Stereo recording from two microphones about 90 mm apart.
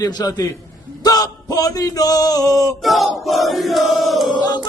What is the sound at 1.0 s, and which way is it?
Male singing, 45° left (ahead or behind).